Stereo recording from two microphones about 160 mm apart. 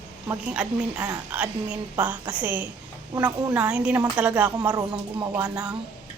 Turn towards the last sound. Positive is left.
turn(degrees=-5)  # may be behind; listen again after turning